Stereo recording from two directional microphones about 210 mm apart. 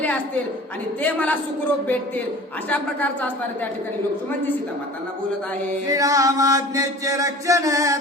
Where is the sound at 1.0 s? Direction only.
10° left (ahead or behind).